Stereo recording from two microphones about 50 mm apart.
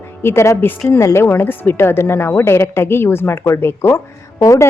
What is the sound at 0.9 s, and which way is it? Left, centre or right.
A woman's voice, left.